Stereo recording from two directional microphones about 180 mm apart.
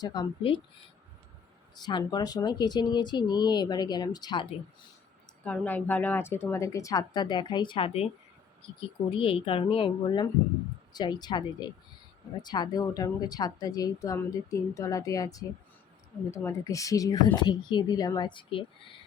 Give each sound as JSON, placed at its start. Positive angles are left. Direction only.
{"t": 0.0, "sound": "speech", "side_deg": 25}
{"t": 1.7, "sound": "speech", "side_deg": 25}
{"t": 5.5, "sound": "speech", "side_deg": 10}